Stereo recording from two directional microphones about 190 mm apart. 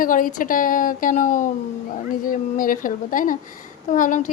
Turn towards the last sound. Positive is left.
turn(degrees=45)  # may be behind; listen again after turning